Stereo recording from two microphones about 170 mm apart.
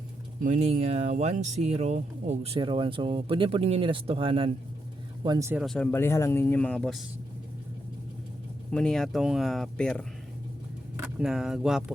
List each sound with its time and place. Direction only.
0.4 s speech: 40° right (ahead or behind); by 5.5 s 25° right (ahead or behind)
5.6 s speech: 5° left (ahead or behind)
8.7 s speech: 5° left (ahead or behind)
11.2 s speech: 5° right (ahead or behind)